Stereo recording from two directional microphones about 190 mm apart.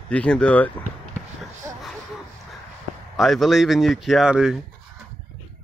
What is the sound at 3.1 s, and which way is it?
Speech, centre (ahead or behind).